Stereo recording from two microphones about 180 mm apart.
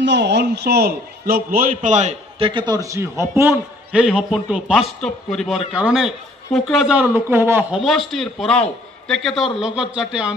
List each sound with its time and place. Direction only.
0.0 s a man's voice: 75° right (ahead or behind); by 4.0 s 15° right (ahead or behind)
4.0 s a man's voice: 5° right (ahead or behind)
8.1 s a man's voice: centre (ahead or behind)